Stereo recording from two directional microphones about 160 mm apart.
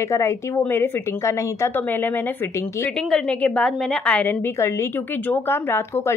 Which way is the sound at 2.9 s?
5° left (ahead or behind).